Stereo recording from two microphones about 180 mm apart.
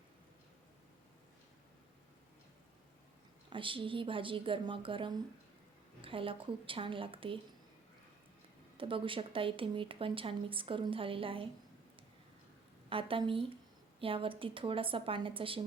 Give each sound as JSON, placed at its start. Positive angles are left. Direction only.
{"t": 3.5, "sound": "a woman's voice", "side_deg": -30}
{"t": 8.8, "sound": "a woman's voice", "side_deg": -30}
{"t": 12.9, "sound": "a woman's voice", "side_deg": -30}